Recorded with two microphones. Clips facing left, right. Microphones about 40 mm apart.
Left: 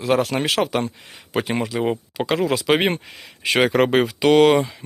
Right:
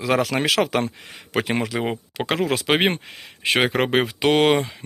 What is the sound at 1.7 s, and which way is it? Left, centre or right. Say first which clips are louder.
Speech: left 2 dB; right.